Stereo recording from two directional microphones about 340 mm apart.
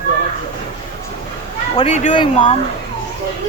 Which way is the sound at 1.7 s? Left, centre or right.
Centre.